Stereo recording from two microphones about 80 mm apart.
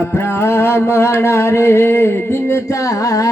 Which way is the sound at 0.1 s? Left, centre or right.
Left.